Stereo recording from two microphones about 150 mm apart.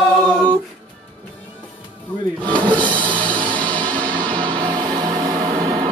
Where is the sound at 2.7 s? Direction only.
30° right (ahead or behind).